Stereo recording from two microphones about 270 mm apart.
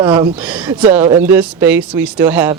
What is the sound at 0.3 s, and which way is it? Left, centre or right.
Speech, centre.